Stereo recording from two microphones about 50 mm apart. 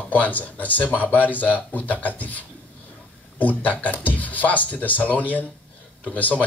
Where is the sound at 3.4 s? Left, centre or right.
Left.